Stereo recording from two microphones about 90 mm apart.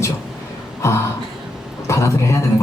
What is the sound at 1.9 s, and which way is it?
Speech, 35° left (ahead or behind).